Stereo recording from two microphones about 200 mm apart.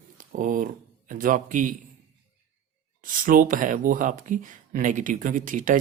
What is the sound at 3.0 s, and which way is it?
Speech, 45° right (ahead or behind).